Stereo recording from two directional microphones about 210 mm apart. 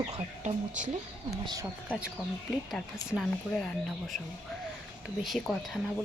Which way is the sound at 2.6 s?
Centre (ahead or behind).